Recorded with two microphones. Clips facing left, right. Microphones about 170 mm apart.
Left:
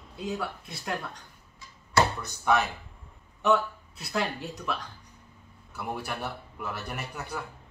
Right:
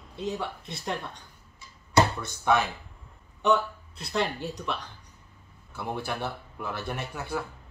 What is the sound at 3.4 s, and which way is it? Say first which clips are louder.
Speech: even; centre (ahead or behind).